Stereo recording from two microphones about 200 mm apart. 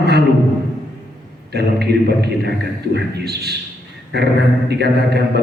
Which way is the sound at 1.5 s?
55° right (ahead or behind).